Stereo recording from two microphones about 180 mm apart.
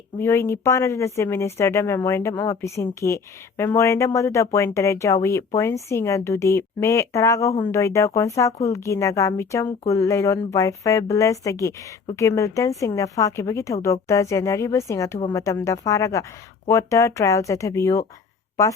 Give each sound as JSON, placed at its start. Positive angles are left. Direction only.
{"t": 0.2, "sound": "speech", "side_deg": 15}